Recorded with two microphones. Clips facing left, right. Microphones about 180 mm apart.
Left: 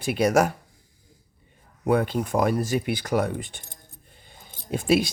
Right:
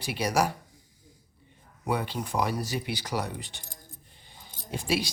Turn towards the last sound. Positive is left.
turn(degrees=50)  # may be behind; listen again after turning